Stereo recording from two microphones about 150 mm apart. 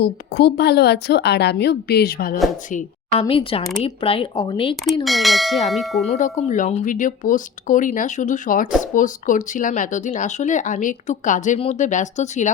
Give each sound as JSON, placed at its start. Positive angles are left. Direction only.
{"t": 0.0, "sound": "a woman's voice", "side_deg": 90}
{"t": 2.6, "sound": "speech", "side_deg": 55}
{"t": 3.2, "sound": "speech", "side_deg": 40}
{"t": 5.0, "sound": "speech", "side_deg": 0}
{"t": 6.1, "sound": "speech", "side_deg": 55}